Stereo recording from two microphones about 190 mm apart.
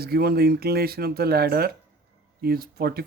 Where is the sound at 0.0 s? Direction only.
55° right (ahead or behind).